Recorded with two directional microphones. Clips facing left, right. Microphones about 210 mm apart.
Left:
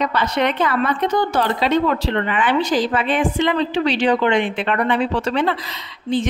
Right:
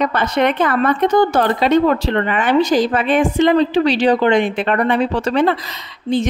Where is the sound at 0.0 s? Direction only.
50° right (ahead or behind).